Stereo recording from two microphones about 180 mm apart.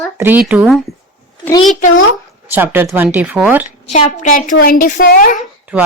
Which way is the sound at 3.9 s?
40° left (ahead or behind).